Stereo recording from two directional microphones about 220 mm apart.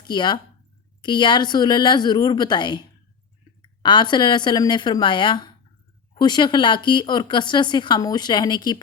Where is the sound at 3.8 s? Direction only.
20° left (ahead or behind).